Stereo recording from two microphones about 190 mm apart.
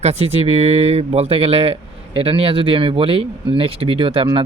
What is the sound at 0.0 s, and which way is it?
Speech, 35° right (ahead or behind).